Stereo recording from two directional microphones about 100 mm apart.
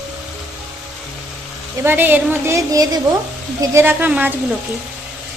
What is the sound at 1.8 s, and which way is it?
A woman's voice, 20° right (ahead or behind).